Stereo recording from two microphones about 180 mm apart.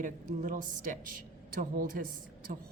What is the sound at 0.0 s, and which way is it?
Speech, 45° right (ahead or behind).